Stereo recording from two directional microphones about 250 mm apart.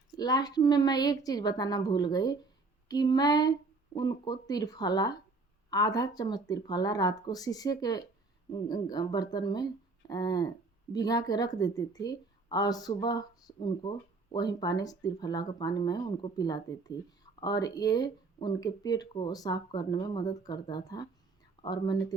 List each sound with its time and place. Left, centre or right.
0.2 s speech: centre